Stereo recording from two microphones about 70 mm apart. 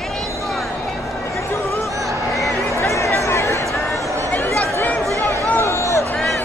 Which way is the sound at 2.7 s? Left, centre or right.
Left.